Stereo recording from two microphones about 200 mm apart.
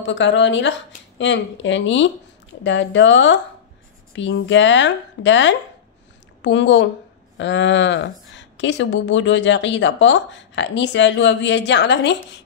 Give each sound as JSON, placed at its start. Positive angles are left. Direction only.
{"t": 0.0, "sound": "a woman's voice", "side_deg": 65}